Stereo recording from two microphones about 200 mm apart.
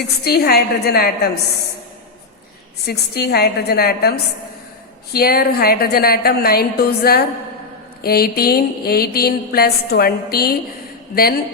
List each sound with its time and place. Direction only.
0.3 s a woman's voice: 50° left (ahead or behind)
2.8 s a woman's voice: 55° left (ahead or behind)
5.1 s a woman's voice: 50° left (ahead or behind)